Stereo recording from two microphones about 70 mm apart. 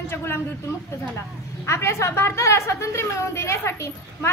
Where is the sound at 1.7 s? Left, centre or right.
Left.